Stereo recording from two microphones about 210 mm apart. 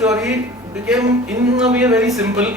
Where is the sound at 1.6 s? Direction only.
5° right (ahead or behind).